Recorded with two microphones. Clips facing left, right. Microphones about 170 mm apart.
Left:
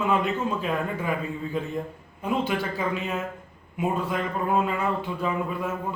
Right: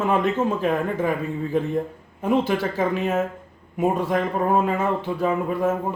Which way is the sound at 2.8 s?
45° right (ahead or behind).